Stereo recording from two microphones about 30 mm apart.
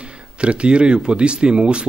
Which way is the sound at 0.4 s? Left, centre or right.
Right.